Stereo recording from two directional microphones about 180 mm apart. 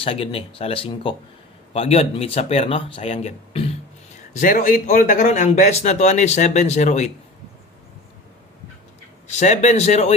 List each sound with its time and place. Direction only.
0.0 s speech: 30° left (ahead or behind)
4.3 s speech: 45° left (ahead or behind)
9.3 s speech: 40° left (ahead or behind)